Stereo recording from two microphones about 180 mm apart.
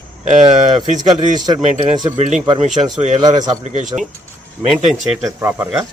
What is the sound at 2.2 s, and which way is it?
Speech, 40° right (ahead or behind).